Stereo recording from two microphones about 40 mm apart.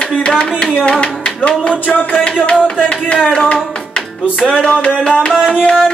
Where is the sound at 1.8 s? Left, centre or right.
Left.